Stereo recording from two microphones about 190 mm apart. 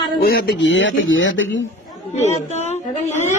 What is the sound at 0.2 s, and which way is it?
Speech, 55° left (ahead or behind).